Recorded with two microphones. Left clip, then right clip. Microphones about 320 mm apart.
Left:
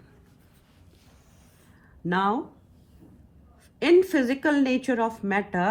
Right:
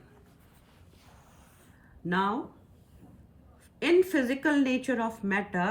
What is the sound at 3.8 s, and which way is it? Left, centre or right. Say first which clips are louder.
A woman's voice: left 4 dB; centre.